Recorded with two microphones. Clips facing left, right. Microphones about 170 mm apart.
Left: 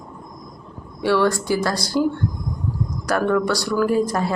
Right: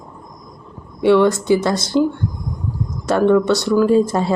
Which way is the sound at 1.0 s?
20° right (ahead or behind).